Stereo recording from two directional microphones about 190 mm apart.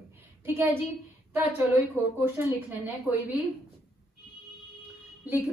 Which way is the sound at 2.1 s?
10° right (ahead or behind).